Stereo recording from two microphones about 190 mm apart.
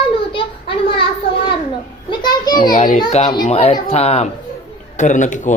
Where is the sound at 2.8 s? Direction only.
45° left (ahead or behind).